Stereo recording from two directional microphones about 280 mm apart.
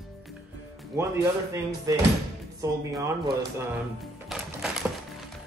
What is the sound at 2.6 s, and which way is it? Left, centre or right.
Speech, centre.